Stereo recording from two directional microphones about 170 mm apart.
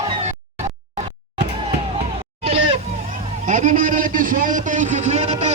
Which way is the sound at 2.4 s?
40° right (ahead or behind).